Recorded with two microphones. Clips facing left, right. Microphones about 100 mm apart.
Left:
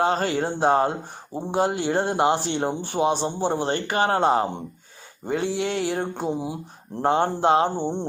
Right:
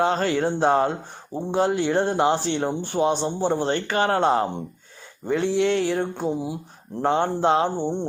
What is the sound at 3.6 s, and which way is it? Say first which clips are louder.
Speech: even; 45° left (ahead or behind).